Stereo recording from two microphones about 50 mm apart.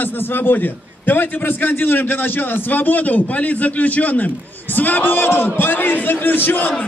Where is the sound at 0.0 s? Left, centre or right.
Left.